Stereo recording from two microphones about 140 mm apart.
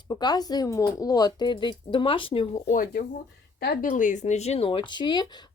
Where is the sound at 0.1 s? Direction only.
30° left (ahead or behind).